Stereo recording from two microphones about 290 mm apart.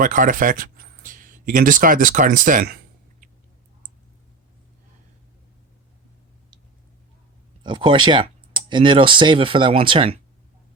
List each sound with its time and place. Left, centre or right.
0.0 s speech: right
7.6 s speech: centre